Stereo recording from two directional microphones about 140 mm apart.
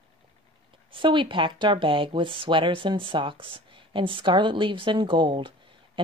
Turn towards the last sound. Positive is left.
turn(degrees=-35)  # may be behind; listen again after turning